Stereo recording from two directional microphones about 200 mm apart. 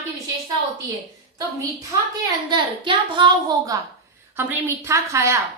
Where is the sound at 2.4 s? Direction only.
25° right (ahead or behind).